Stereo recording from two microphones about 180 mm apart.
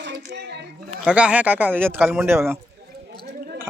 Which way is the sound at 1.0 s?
5° right (ahead or behind).